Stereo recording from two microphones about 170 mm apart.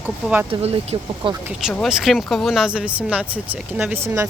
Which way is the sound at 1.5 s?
5° right (ahead or behind).